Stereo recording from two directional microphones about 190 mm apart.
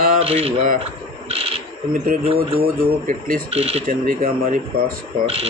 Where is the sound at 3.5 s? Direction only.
30° right (ahead or behind).